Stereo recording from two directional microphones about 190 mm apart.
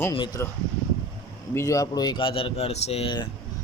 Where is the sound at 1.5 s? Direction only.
15° left (ahead or behind).